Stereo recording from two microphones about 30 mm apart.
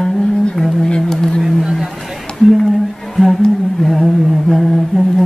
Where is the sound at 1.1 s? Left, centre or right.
Centre.